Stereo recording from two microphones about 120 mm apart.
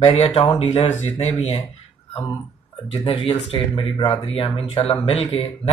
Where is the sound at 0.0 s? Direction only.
55° left (ahead or behind).